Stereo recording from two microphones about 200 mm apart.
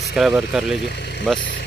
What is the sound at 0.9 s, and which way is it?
Vehicle, 55° left (ahead or behind).